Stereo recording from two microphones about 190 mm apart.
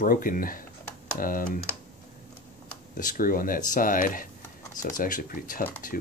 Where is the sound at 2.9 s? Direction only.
45° left (ahead or behind).